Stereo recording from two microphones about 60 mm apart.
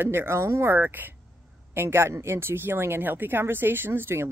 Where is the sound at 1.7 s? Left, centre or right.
Right.